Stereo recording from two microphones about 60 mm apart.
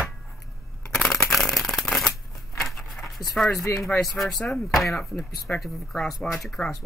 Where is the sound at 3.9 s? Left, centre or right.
Centre.